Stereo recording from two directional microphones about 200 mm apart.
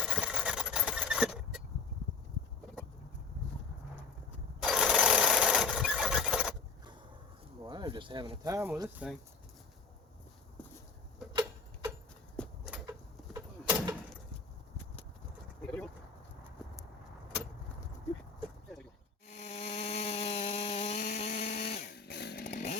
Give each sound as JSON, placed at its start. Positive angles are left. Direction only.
{"t": 0.0, "sound": "sewing machine", "side_deg": -5}
{"t": 4.6, "sound": "sewing machine", "side_deg": 0}
{"t": 7.6, "sound": "speech", "side_deg": -20}
{"t": 10.6, "sound": "clip-clop", "side_deg": 5}
{"t": 11.3, "sound": "tick-tock", "side_deg": -15}
{"t": 12.4, "sound": "a sound", "side_deg": 0}
{"t": 13.3, "sound": "vehicle", "side_deg": -15}
{"t": 15.6, "sound": "a sound", "side_deg": 5}
{"t": 19.3, "sound": "insect", "side_deg": 35}
{"t": 21.9, "sound": "chainsaw", "side_deg": 55}
{"t": 22.4, "sound": "chainsaw", "side_deg": 35}